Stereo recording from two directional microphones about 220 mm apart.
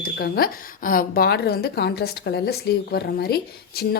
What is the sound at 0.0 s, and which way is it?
Speech, 45° left (ahead or behind).